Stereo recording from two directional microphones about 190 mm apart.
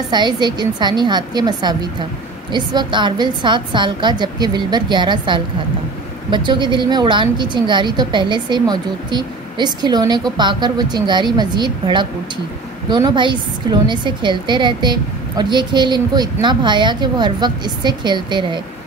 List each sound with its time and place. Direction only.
0.1 s a woman's voice: 25° right (ahead or behind)